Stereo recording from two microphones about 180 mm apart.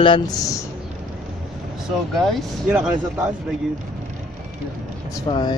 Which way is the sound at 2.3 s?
5° right (ahead or behind).